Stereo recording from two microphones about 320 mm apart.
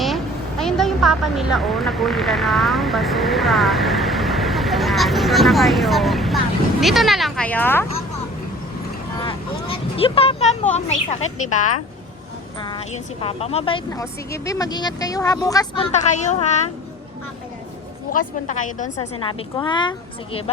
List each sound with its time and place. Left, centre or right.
0.6 s speech: centre
9.1 s vehicle: centre
11.2 s a woman's voice: left
13.2 s speech: centre
18.1 s a woman's voice: left